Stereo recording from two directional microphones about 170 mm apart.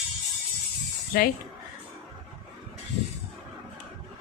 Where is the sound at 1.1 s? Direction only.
60° left (ahead or behind).